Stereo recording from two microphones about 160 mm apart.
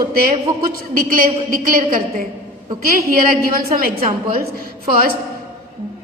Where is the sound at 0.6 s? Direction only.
65° right (ahead or behind).